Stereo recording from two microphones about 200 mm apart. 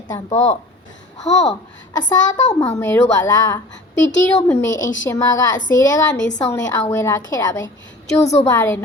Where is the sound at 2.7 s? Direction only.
15° left (ahead or behind).